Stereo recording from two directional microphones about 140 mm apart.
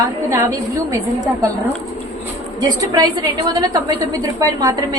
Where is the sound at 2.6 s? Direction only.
30° right (ahead or behind).